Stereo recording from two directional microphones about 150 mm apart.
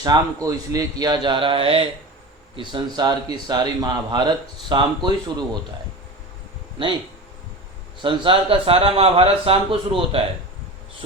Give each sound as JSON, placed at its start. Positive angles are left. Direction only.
{"t": 0.0, "sound": "speech", "side_deg": -25}
{"t": 8.0, "sound": "speech", "side_deg": -35}